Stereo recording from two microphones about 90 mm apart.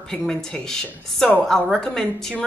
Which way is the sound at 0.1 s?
5° left (ahead or behind).